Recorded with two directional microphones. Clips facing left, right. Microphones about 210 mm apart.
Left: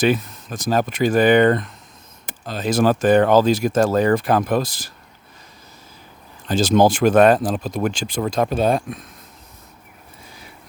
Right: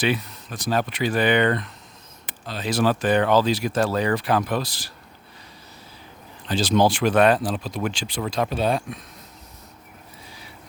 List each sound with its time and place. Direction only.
0.0 s speech: 45° left (ahead or behind)
6.5 s speech: 45° left (ahead or behind)